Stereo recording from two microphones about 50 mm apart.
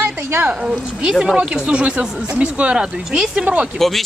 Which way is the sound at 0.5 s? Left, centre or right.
Centre.